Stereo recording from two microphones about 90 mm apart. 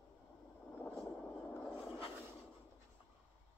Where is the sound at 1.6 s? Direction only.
5° left (ahead or behind).